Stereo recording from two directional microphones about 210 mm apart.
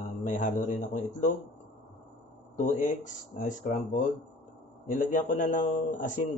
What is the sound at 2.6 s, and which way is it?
Speech, 35° left (ahead or behind).